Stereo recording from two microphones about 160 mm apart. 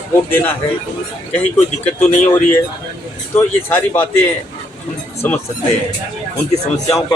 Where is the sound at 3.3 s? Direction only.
15° left (ahead or behind).